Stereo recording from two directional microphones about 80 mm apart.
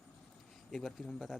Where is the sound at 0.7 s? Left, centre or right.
Centre.